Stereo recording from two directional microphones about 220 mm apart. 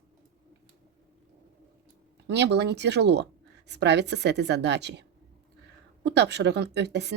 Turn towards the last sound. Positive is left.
turn(degrees=-50)  # may be behind; listen again after turning